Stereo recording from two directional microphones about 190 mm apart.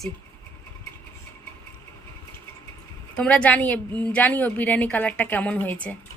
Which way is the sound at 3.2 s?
5° left (ahead or behind).